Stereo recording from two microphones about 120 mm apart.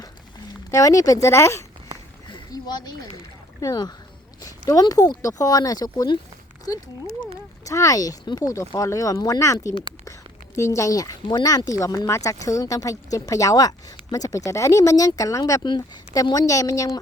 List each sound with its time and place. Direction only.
0.7 s speech: 30° left (ahead or behind)
2.3 s speech: 35° left (ahead or behind)
15.6 s speech: 40° left (ahead or behind)